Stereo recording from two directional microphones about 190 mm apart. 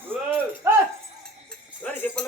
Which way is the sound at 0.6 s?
15° right (ahead or behind).